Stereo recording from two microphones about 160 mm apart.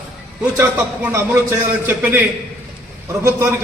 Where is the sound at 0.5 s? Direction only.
15° right (ahead or behind).